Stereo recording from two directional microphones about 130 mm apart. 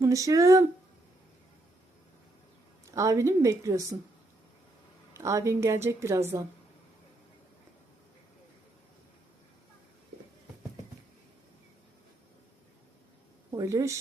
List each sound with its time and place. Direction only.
0.0 s a woman's voice: 25° right (ahead or behind)
2.9 s a woman's voice: 25° right (ahead or behind)
5.1 s a woman's voice: 20° right (ahead or behind)
13.5 s a woman's voice: 30° right (ahead or behind)